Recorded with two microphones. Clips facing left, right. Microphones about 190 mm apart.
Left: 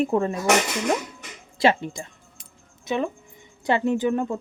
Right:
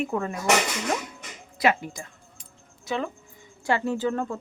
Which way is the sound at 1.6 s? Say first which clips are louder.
Left 3 dB; 25° left (ahead or behind).